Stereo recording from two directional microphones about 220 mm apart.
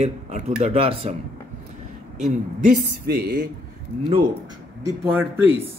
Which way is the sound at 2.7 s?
45° right (ahead or behind).